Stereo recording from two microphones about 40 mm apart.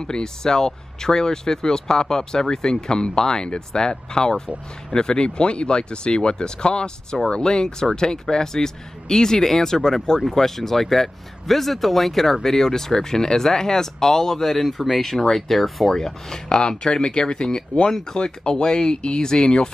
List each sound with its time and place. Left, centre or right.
0.0 s speech: centre